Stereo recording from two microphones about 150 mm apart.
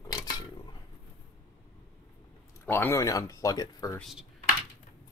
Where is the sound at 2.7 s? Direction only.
15° left (ahead or behind).